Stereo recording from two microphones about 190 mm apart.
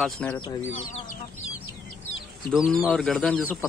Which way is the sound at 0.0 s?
5° left (ahead or behind).